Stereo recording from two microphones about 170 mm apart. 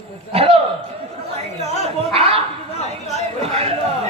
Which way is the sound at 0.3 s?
35° right (ahead or behind).